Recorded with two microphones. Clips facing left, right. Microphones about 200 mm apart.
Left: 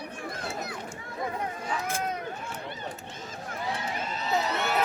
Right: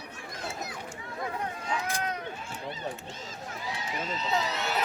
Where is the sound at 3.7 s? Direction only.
60° left (ahead or behind).